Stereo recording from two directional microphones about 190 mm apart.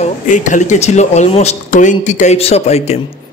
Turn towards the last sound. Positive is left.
turn(degrees=35)  # may be behind; listen again after turning